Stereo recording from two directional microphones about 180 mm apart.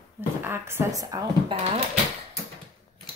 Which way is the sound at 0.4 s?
15° right (ahead or behind).